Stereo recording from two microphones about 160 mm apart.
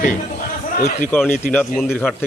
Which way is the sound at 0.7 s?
60° left (ahead or behind).